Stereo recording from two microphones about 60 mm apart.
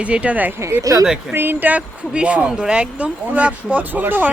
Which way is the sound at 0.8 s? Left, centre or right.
Right.